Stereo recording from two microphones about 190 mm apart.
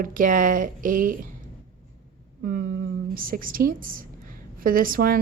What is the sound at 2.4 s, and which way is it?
A woman's voice, 50° right (ahead or behind).